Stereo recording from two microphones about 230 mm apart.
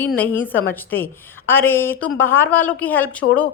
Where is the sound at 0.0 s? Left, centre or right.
Centre.